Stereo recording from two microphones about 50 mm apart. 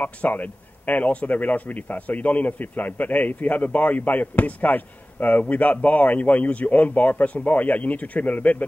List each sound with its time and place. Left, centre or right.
0.0 s speech: left